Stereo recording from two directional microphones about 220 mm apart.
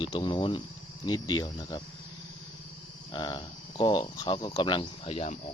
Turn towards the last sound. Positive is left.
turn(degrees=25)  # may be behind; listen again after turning